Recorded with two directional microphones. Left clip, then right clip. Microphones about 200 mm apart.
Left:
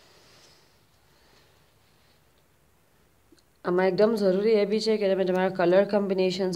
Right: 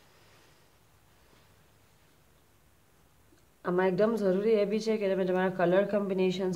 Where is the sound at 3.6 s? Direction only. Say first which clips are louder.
Left 5 dB; 40° left (ahead or behind).